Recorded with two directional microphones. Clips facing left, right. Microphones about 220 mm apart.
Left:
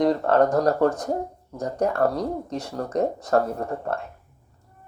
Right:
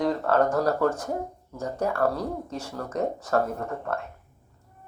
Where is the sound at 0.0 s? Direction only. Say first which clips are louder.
Left 4 dB; 35° left (ahead or behind).